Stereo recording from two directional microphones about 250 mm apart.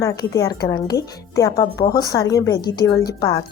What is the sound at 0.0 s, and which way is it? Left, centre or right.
Speech, centre.